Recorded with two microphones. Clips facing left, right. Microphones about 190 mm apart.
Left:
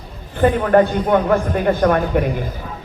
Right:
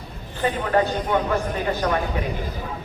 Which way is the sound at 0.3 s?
55° left (ahead or behind).